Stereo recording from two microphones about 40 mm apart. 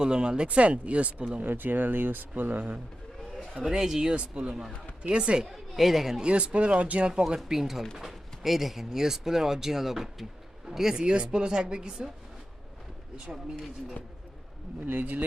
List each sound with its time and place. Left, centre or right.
0.0 s speech: right
1.5 s speech: right
3.6 s speech: centre
4.1 s speech: right
5.5 s speech: centre
6.2 s speech: right
7.3 s speech: centre
11.0 s speech: right
14.8 s speech: right